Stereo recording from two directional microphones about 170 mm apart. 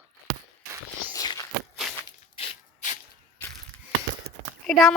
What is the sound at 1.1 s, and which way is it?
Walk, 25° left (ahead or behind).